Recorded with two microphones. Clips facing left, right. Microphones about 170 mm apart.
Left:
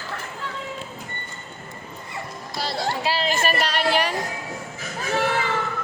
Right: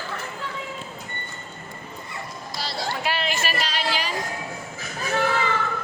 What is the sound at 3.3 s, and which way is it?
Music, 50° left (ahead or behind).